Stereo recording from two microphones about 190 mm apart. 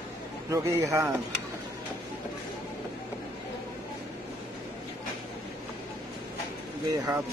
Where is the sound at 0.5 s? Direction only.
15° right (ahead or behind).